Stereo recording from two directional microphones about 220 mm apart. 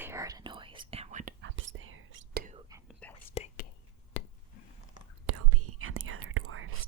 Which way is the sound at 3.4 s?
30° left (ahead or behind).